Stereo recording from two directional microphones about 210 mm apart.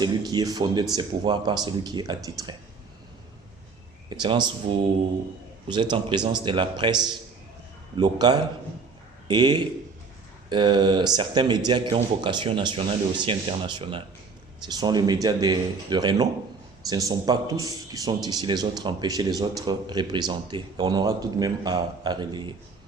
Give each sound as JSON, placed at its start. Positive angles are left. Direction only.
{"t": 0.0, "sound": "speech", "side_deg": -20}
{"t": 4.1, "sound": "speech", "side_deg": -20}